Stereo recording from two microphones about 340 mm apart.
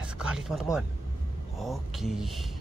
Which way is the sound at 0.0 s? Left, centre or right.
Centre.